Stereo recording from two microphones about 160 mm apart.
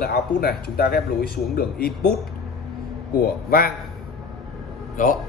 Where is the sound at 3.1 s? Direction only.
65° left (ahead or behind).